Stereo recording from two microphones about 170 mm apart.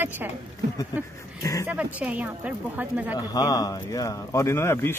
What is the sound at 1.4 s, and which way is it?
Speech, 20° left (ahead or behind).